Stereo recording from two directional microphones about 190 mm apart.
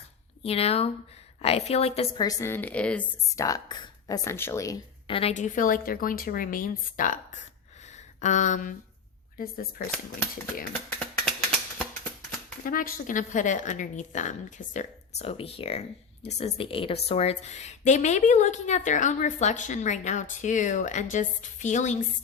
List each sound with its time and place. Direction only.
0.4 s a woman's voice: 30° left (ahead or behind)
2.2 s speech: 15° left (ahead or behind)
3.4 s speech: 20° left (ahead or behind)
5.0 s a woman's voice: 30° left (ahead or behind)
5.3 s speech: 40° left (ahead or behind)
9.9 s speech: 10° left (ahead or behind)
12.6 s a woman's voice: 45° left (ahead or behind)